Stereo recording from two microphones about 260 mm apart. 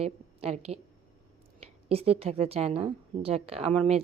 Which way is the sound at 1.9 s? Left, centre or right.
Right.